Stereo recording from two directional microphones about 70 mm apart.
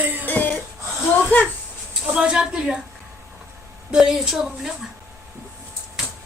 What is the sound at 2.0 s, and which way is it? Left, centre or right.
Speech, centre.